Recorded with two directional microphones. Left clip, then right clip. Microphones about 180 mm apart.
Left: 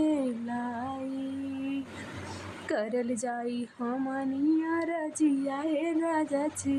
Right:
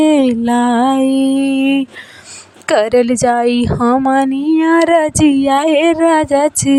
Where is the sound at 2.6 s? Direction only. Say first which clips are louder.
Right 19 dB; 65° right (ahead or behind).